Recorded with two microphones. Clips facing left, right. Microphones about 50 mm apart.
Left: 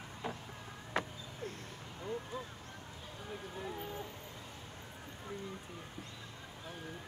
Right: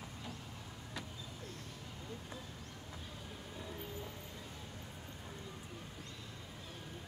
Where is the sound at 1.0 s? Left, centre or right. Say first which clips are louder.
Left 11 dB; left.